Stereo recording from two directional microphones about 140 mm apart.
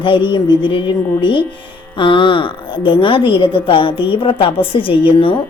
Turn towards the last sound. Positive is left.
turn(degrees=40)  # may be behind; listen again after turning